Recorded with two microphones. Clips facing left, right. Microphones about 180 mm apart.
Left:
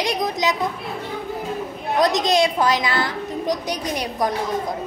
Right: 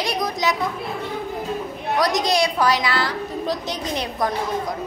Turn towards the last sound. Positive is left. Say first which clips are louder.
# left 1 dB
turn(degrees=15)  # may be behind; listen again after turning